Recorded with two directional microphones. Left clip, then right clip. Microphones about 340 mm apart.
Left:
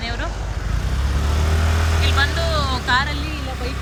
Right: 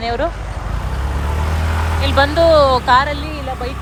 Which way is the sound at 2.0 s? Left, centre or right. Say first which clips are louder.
Right 8 dB; centre.